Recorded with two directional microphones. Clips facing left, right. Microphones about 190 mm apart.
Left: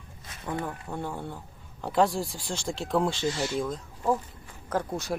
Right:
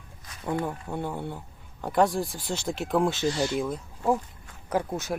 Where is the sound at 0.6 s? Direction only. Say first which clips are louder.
Right 3 dB; 15° right (ahead or behind).